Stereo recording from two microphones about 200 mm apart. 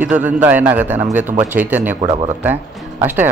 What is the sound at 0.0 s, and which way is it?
Speech, 10° right (ahead or behind).